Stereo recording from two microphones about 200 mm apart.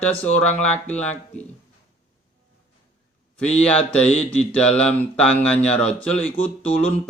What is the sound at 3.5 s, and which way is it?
Mantra, 5° left (ahead or behind).